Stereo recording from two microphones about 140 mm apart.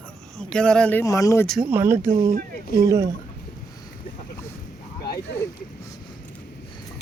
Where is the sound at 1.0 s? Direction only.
25° left (ahead or behind).